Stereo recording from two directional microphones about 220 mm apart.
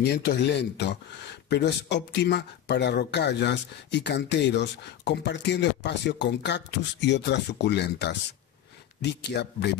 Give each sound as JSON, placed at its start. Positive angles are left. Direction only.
{"t": 0.0, "sound": "speech", "side_deg": 50}